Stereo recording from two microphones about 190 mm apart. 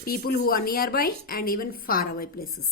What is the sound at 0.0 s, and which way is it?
A woman's voice, 50° left (ahead or behind).